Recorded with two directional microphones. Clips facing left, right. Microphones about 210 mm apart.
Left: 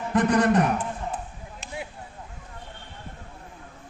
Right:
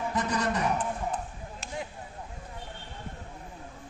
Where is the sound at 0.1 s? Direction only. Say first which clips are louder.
Left 12 dB; 55° left (ahead or behind).